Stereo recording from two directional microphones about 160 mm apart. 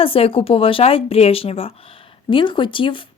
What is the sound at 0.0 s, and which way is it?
Speech, 35° left (ahead or behind).